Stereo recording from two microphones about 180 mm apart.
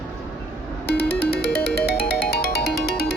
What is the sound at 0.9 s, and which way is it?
Music, 65° left (ahead or behind).